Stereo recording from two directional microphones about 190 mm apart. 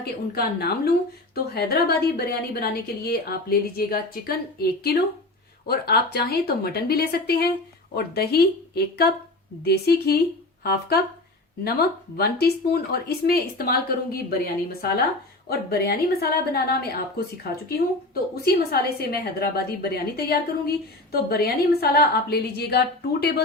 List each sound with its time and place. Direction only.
0.0 s a woman's voice: 55° left (ahead or behind)